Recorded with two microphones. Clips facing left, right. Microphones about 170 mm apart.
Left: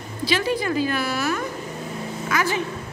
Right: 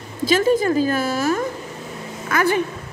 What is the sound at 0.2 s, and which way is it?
A woman's voice, 45° right (ahead or behind).